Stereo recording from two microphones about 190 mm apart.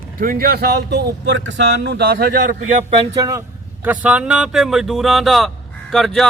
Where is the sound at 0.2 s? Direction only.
50° right (ahead or behind).